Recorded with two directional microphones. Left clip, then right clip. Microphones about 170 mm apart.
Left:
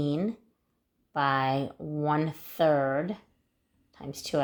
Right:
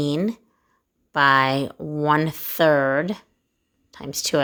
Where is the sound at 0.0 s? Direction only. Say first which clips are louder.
Right 7 dB; 40° right (ahead or behind).